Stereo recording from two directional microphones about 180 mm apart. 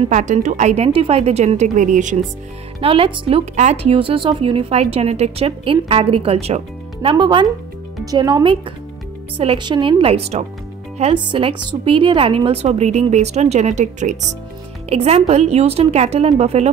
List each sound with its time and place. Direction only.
0.0 s speech: 40° right (ahead or behind)
2.8 s speech: 30° right (ahead or behind)